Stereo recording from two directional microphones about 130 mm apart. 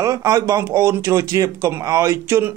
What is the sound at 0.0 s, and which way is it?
Speech, 25° right (ahead or behind).